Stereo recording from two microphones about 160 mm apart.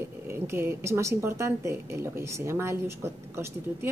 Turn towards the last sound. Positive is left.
turn(degrees=-15)  # may be behind; listen again after turning